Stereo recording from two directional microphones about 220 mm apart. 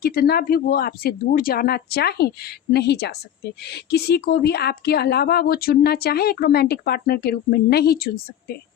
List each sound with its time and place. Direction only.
0.0 s speech: 45° left (ahead or behind)